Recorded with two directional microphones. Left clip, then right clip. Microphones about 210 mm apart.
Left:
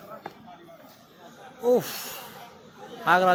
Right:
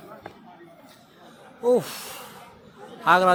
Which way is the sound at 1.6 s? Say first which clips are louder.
Right 1 dB; 10° right (ahead or behind).